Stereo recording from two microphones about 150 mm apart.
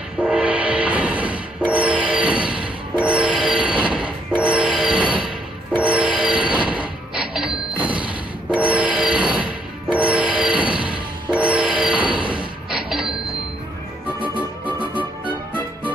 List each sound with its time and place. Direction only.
0.2 s music: 5° right (ahead or behind)
12.6 s train: 5° right (ahead or behind)
14.2 s music: 35° right (ahead or behind)